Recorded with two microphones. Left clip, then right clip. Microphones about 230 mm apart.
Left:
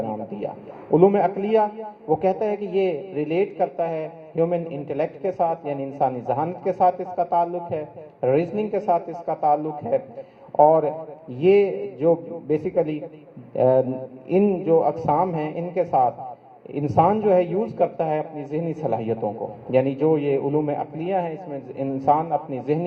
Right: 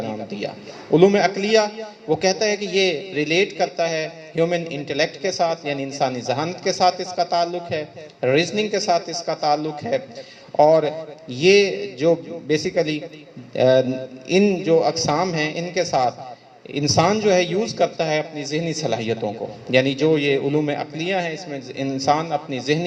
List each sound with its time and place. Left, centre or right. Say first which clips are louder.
0.0 s a man's voice: even; right
22.0 s a man's voice: even; right